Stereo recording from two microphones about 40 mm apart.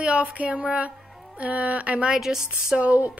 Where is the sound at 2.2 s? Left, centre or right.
Centre.